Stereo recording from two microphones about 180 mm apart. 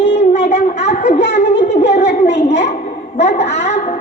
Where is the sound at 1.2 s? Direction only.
70° left (ahead or behind).